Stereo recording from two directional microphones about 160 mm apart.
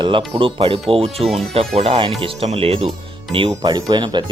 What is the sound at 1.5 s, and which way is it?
Speech, 40° right (ahead or behind).